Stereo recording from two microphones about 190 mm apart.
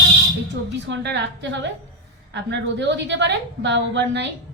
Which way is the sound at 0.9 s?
65° right (ahead or behind).